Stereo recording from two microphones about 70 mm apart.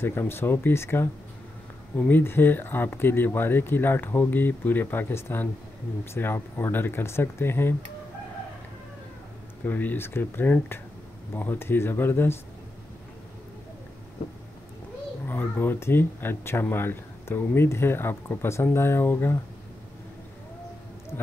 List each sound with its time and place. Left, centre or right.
0.0 s speech: left
9.7 s speech: left
15.2 s speech: left